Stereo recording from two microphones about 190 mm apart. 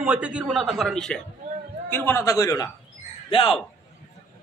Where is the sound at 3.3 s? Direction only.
30° left (ahead or behind).